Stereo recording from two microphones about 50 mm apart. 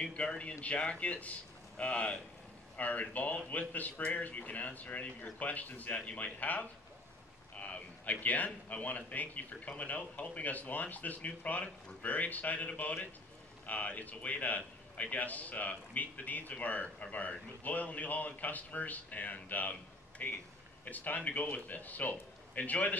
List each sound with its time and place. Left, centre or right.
0.1 s a man's voice: left
7.5 s a sound: left
8.6 s a man's voice: left